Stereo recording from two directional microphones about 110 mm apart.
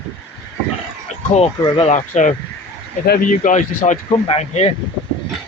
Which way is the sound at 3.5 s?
90° left.